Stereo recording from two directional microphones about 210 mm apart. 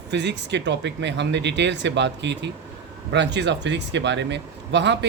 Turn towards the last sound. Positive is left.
turn(degrees=-55)  # may be behind; listen again after turning